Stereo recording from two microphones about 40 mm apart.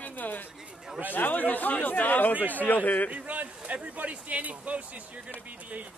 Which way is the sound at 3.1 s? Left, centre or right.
Right.